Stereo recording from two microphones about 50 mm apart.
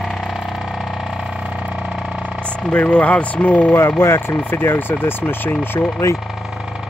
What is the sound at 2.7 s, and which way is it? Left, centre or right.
Speech, left.